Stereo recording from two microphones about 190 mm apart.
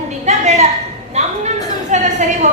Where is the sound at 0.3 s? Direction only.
35° right (ahead or behind).